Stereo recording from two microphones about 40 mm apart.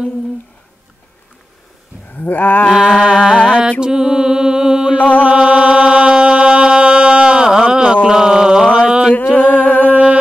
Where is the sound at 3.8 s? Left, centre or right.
Centre.